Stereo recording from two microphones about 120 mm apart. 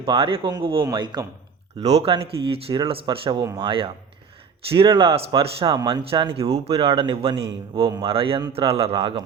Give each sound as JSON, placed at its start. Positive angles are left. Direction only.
{"t": 0.0, "sound": "speech", "side_deg": -50}
{"t": 0.9, "sound": "a man's voice", "side_deg": -40}
{"t": 1.8, "sound": "speech", "side_deg": -60}